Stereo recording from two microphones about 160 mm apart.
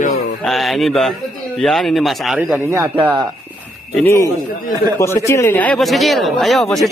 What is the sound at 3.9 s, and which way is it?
A man's voice, 15° left (ahead or behind).